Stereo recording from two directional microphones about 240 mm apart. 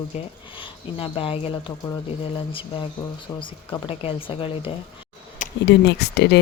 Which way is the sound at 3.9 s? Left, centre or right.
Left.